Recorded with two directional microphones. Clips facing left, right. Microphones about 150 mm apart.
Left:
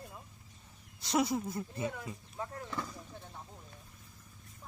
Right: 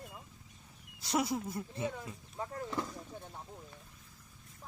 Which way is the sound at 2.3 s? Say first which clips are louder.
Right 3 dB; 25° right (ahead or behind).